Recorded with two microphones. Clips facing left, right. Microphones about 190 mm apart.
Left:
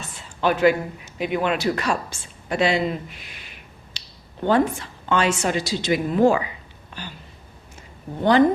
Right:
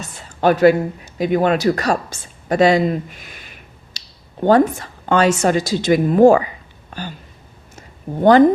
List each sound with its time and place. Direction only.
0.2 s speech: 40° right (ahead or behind)
3.9 s finger snapping: 40° right (ahead or behind)
4.4 s a woman's voice: 45° right (ahead or behind)
7.8 s a sound: 45° right (ahead or behind)